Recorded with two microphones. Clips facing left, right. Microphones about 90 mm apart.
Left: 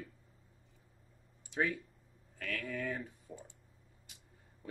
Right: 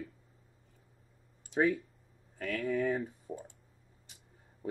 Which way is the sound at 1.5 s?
40° right (ahead or behind).